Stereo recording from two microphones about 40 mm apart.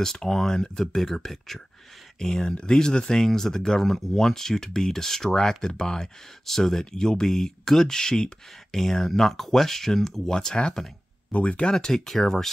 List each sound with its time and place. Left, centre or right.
0.0 s speech: centre
11.3 s speech: left
11.7 s speech: centre